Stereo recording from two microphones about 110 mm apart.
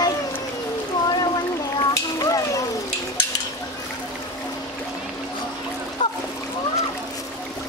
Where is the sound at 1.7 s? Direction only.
35° left (ahead or behind).